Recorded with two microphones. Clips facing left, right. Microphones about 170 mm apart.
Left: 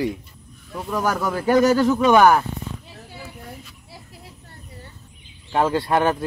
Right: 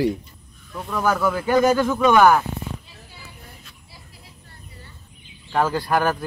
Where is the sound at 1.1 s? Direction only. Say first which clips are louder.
Left 3 dB; 40° left (ahead or behind).